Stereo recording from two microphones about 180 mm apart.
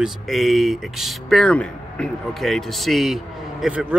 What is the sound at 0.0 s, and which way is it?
Speech, centre (ahead or behind).